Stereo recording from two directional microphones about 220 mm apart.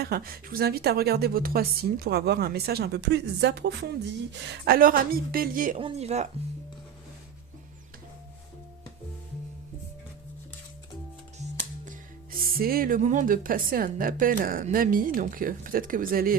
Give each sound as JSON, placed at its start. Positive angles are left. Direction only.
{"t": 0.0, "sound": "a woman's voice", "side_deg": -40}
{"t": 12.5, "sound": "a woman's voice", "side_deg": -40}